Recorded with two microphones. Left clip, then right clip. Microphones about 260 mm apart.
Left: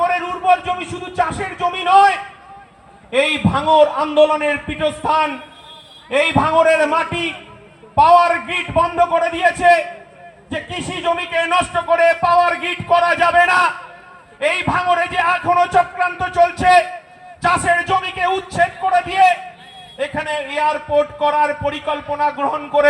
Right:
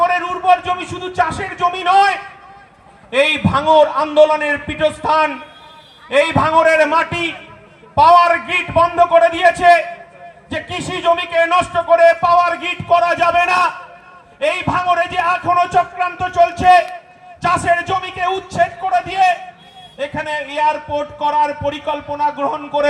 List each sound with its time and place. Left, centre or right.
0.0 s music: right
3.1 s a man's voice: right